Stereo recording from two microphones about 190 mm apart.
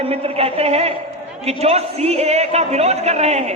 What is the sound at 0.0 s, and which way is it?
A man's voice, 30° right (ahead or behind).